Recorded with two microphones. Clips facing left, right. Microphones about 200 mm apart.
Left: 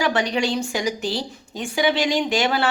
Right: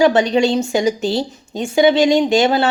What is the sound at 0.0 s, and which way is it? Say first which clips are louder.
A woman's voice: right 8 dB; 25° right (ahead or behind).